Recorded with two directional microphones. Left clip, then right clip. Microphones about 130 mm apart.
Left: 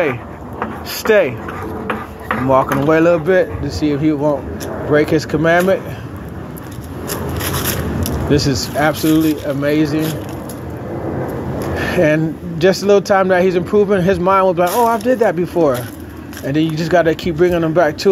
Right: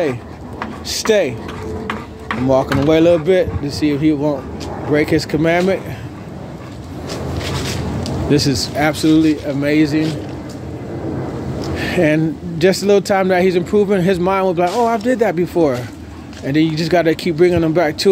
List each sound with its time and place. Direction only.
0.9 s speech: 30° right (ahead or behind)
2.5 s speech: 40° right (ahead or behind)
8.3 s speech: 25° right (ahead or behind)
11.7 s speech: 25° right (ahead or behind)